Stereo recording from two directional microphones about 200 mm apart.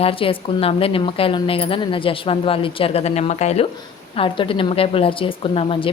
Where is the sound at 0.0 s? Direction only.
25° left (ahead or behind).